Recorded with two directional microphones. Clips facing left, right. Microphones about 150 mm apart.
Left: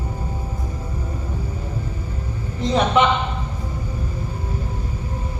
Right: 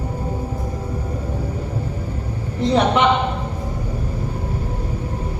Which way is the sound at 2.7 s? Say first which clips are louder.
Right 1 dB; 65° right (ahead or behind).